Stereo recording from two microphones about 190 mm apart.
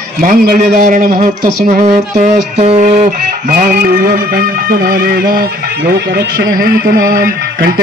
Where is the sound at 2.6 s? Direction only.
35° right (ahead or behind).